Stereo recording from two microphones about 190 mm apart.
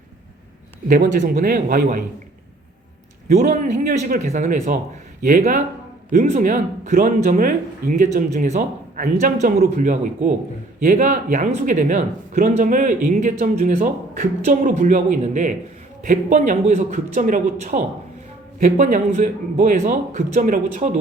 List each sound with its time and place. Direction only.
0.9 s speech: 50° right (ahead or behind)
3.2 s a man's voice: 40° right (ahead or behind)